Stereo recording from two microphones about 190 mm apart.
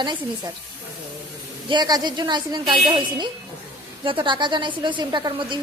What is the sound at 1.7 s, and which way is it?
A woman's voice, 20° right (ahead or behind).